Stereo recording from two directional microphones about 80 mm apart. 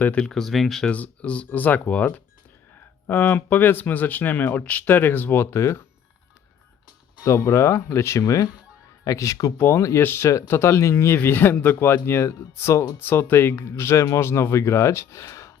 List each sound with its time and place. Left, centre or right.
0.0 s speech: left
0.3 s speech: centre
0.9 s speech: centre; by 5.8 s left
7.3 s speech: left
8.2 s speech: left
9.6 s speech: left